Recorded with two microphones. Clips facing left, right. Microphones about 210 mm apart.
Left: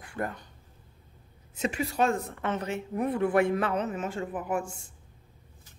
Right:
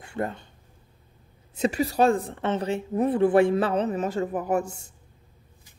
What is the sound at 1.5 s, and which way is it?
A woman's voice, 35° right (ahead or behind).